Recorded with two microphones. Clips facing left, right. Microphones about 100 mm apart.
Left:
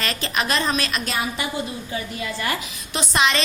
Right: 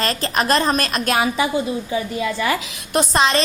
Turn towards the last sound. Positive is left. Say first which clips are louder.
# right 4 dB
turn(degrees=-35)  # may be behind; listen again after turning